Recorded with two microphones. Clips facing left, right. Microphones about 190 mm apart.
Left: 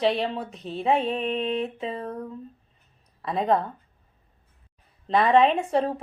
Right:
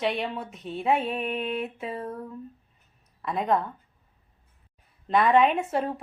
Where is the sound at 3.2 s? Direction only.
30° left (ahead or behind).